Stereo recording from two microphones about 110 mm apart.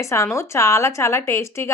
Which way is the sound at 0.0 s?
25° left (ahead or behind).